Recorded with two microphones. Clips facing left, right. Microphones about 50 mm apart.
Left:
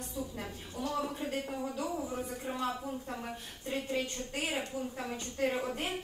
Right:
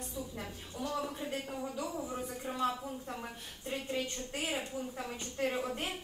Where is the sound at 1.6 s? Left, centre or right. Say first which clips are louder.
Left 2 dB; left.